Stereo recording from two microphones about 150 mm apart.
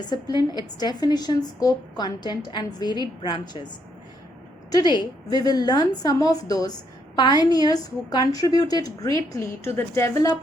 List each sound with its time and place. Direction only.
0.0 s a woman's voice: 30° left (ahead or behind)
4.7 s a woman's voice: 30° left (ahead or behind)